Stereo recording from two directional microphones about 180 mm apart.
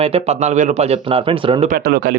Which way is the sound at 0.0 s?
35° right (ahead or behind).